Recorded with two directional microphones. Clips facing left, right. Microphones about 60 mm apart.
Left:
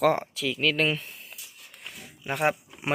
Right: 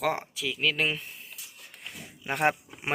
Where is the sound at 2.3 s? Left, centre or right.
Right.